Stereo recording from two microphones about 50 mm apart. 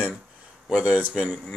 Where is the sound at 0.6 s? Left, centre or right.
Centre.